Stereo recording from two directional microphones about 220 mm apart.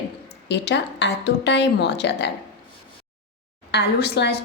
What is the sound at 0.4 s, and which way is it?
A woman's voice, 50° left (ahead or behind).